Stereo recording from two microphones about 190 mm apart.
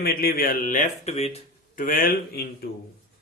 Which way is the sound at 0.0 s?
55° left (ahead or behind).